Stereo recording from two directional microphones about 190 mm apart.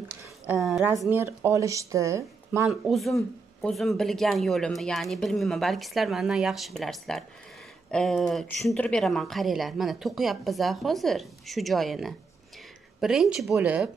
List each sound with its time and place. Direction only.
0.6 s speech: centre (ahead or behind)
1.0 s speech: 10° right (ahead or behind)
2.7 s speech: centre (ahead or behind)